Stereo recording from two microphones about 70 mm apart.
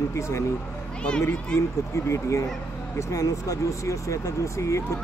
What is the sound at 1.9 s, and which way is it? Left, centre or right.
Speech, left.